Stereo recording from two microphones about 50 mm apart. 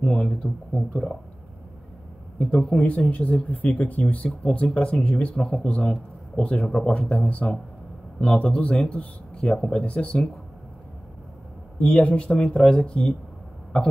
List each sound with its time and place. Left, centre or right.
0.0 s speech: centre
2.7 s speech: left
4.6 s a man's voice: centre
11.8 s speech: left